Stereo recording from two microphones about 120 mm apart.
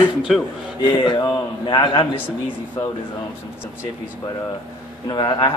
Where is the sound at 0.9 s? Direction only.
40° left (ahead or behind).